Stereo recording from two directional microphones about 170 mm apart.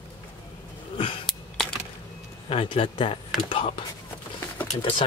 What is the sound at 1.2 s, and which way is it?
Computer keyboard, 5° left (ahead or behind).